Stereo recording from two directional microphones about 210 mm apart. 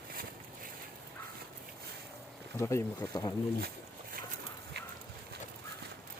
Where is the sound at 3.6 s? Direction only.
50° right (ahead or behind).